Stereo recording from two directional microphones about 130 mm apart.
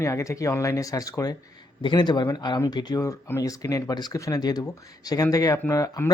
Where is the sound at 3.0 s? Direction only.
20° left (ahead or behind).